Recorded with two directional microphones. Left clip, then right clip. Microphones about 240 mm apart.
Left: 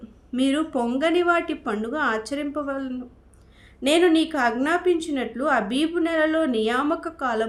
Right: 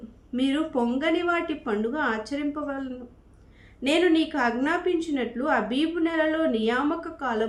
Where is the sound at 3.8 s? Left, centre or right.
Left.